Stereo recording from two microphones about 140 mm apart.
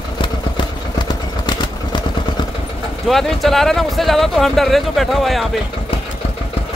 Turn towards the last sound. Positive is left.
turn(degrees=0)  # may be behind; listen again after turning